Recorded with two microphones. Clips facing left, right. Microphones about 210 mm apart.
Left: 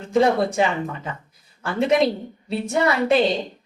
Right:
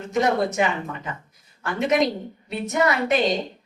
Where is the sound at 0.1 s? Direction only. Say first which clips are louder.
Left 3 dB; 30° left (ahead or behind).